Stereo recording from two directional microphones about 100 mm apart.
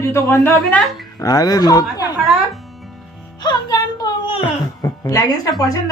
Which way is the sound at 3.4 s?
40° left (ahead or behind).